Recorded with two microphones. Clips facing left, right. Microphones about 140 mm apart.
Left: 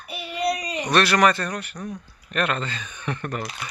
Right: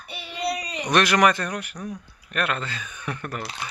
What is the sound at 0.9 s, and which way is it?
Speech, 15° right (ahead or behind).